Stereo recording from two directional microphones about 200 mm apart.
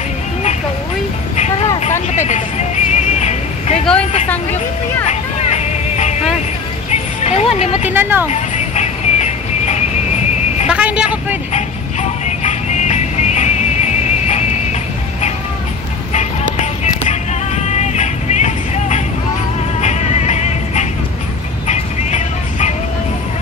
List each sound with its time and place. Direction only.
1.3 s vehicle: 35° left (ahead or behind)
2.2 s music: 35° left (ahead or behind)
5.0 s vehicle: 35° left (ahead or behind)
6.9 s music: 30° left (ahead or behind)
7.9 s speech: 10° right (ahead or behind)
8.3 s music: 35° left (ahead or behind)
10.7 s vehicle: 5° right (ahead or behind)
11.5 s music: 35° left (ahead or behind)
16.5 s music: 35° left (ahead or behind)
21.6 s vehicle: 35° left (ahead or behind)